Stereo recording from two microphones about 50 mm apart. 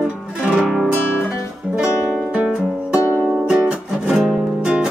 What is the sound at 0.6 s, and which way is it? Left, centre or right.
Music, centre.